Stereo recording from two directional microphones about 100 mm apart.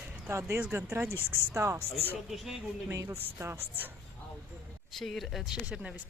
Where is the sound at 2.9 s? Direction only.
25° right (ahead or behind).